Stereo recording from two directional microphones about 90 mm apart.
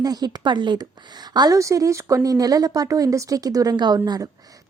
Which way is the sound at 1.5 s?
35° right (ahead or behind).